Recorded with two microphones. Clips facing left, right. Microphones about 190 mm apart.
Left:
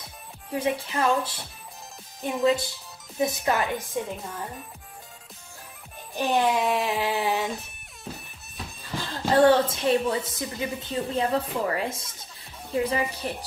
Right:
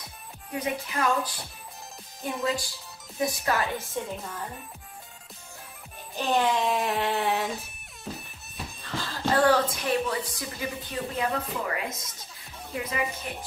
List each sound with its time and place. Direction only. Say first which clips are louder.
0.5 s a woman's voice: left 4 dB; 30° left (ahead or behind)
6.1 s speech: left 2 dB; 15° left (ahead or behind); by 8.1 s centre (ahead or behind)
8.8 s a woman's voice: left 1 dB; 15° left (ahead or behind); by 13.3 s 35° left (ahead or behind)